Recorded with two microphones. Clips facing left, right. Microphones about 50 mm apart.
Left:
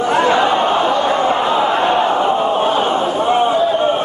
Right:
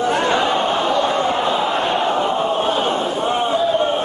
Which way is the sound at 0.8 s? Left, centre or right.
Centre.